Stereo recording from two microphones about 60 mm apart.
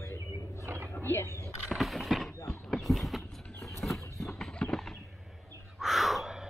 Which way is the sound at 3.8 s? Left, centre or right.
Centre.